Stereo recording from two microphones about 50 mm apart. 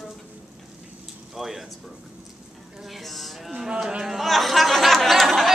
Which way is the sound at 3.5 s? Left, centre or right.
Centre.